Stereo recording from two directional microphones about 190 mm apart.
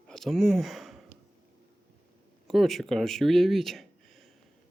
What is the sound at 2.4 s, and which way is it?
Speech, centre (ahead or behind).